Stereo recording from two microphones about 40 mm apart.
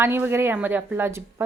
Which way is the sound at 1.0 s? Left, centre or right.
Right.